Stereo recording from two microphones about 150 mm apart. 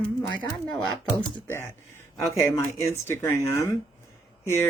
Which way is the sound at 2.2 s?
20° left (ahead or behind).